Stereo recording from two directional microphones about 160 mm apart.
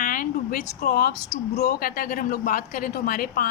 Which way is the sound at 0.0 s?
60° left (ahead or behind).